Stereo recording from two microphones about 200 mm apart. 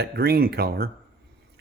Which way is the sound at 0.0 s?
50° right (ahead or behind).